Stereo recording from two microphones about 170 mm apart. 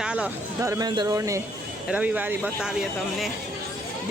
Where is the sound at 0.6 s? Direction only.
15° right (ahead or behind).